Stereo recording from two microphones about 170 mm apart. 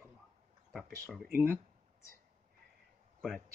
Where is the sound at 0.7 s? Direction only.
Centre (ahead or behind).